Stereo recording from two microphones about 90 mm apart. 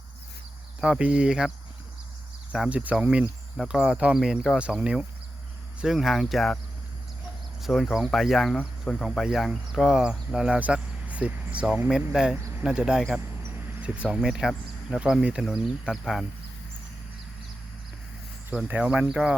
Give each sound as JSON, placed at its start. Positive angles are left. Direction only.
{"t": 0.8, "sound": "speech", "side_deg": -10}
{"t": 7.6, "sound": "speech", "side_deg": 0}
{"t": 12.4, "sound": "a sound", "side_deg": -35}
{"t": 12.6, "sound": "speech", "side_deg": -10}
{"t": 18.5, "sound": "speech", "side_deg": -10}